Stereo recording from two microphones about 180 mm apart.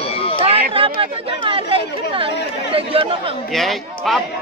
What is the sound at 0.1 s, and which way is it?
Run, 30° left (ahead or behind).